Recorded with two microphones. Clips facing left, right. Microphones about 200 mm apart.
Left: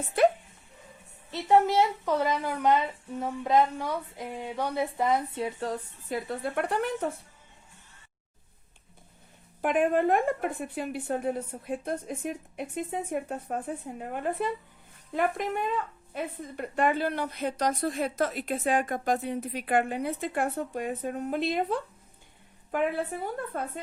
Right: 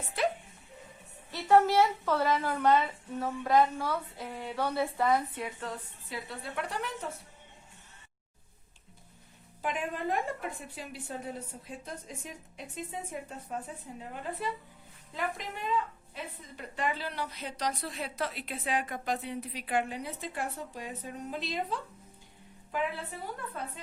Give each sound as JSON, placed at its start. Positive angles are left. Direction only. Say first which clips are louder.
{"t": 1.3, "sound": "a woman's voice", "louder": "left 1 dB", "side_deg": 20}
{"t": 9.6, "sound": "a woman's voice", "louder": "left 10 dB", "side_deg": 55}